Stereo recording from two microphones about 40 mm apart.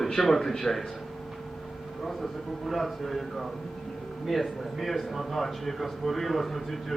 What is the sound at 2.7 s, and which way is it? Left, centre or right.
A man's voice, centre.